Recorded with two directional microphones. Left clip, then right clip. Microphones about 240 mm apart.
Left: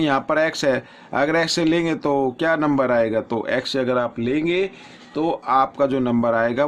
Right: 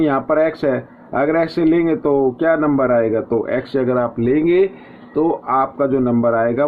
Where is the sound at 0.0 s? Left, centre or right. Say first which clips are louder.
Right 3 dB; left; by 4.7 s centre.